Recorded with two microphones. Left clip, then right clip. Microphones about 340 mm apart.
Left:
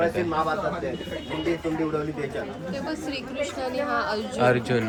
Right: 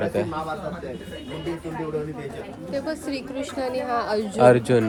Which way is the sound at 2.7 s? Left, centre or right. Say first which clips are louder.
Right 5 dB; right.